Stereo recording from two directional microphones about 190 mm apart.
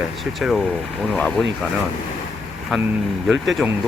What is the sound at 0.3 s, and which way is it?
Speech, centre (ahead or behind).